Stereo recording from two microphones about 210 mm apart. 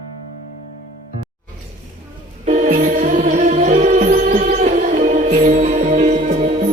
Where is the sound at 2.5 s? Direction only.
35° right (ahead or behind).